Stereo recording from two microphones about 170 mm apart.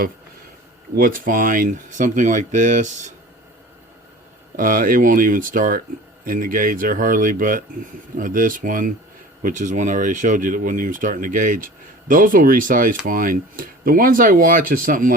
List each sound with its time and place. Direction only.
0.9 s speech: 55° right (ahead or behind)
4.5 s speech: 55° right (ahead or behind)